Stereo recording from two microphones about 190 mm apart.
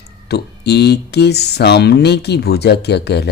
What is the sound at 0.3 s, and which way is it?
Speech, 60° left (ahead or behind).